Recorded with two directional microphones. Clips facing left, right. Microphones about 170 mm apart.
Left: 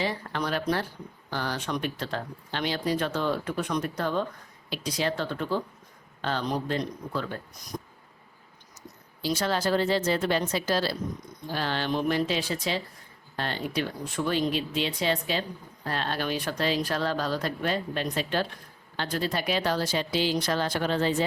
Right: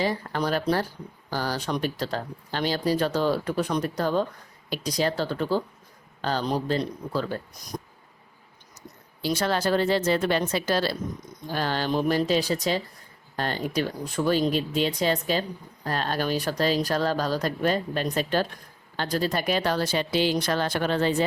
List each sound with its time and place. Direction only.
0.0 s speech: 40° right (ahead or behind)
9.2 s speech: 60° right (ahead or behind)
11.5 s speech: 40° right (ahead or behind); by 21.2 s 60° right (ahead or behind)